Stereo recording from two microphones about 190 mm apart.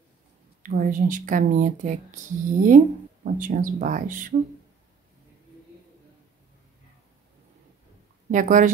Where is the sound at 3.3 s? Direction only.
45° right (ahead or behind).